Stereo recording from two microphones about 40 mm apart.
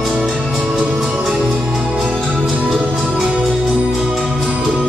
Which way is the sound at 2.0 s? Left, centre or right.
Centre.